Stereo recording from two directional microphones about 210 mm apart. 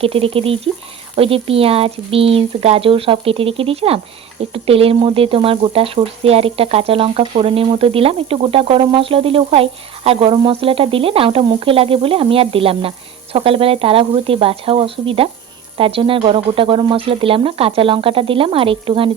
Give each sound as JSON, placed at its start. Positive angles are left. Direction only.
{"t": 0.0, "sound": "speech", "side_deg": -25}